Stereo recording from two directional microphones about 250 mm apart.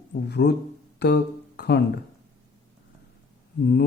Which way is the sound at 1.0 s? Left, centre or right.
Left.